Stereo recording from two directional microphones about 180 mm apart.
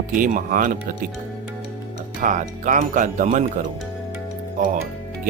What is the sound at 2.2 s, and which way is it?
Speech, 45° right (ahead or behind).